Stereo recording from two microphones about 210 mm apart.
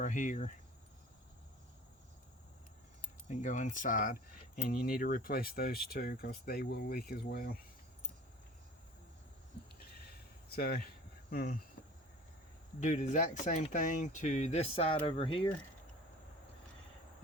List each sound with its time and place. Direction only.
0.0 s speech: 40° left (ahead or behind)
3.2 s speech: 35° left (ahead or behind)
10.5 s speech: 45° left (ahead or behind)
12.8 s speech: 35° left (ahead or behind)